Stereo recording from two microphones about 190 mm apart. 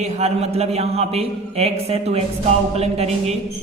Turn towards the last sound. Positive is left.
turn(degrees=-35)  # may be behind; listen again after turning